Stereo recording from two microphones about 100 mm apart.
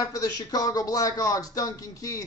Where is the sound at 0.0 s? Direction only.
40° left (ahead or behind).